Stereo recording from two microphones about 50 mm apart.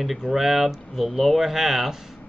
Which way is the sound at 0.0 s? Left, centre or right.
Centre.